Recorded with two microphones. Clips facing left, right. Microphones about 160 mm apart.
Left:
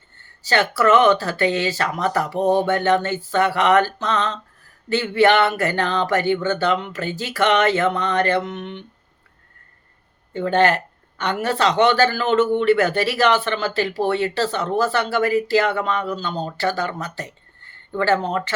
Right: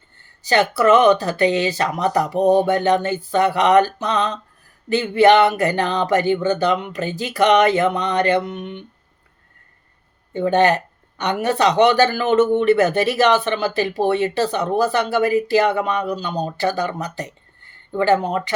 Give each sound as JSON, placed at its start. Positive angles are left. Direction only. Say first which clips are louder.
{"t": 0.4, "sound": "speech", "louder": "right 2 dB", "side_deg": -20}
{"t": 10.3, "sound": "speech", "louder": "right 2 dB", "side_deg": -15}